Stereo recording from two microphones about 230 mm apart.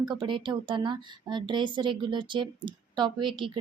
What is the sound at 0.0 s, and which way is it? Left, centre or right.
A woman's voice, centre.